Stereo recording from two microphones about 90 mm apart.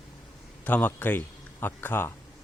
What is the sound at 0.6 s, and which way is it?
A man's voice, 20° left (ahead or behind).